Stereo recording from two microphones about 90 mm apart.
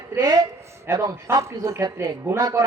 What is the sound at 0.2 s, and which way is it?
Speech, 45° right (ahead or behind).